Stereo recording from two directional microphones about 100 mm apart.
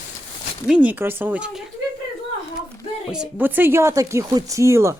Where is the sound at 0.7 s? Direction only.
15° right (ahead or behind).